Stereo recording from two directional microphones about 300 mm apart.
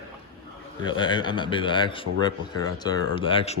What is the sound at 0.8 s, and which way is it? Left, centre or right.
A man's voice, centre.